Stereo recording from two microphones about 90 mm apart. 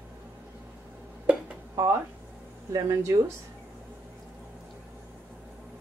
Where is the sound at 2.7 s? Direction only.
35° right (ahead or behind).